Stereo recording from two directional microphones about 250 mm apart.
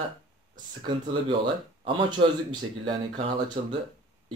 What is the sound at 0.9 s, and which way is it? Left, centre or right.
Speech, centre.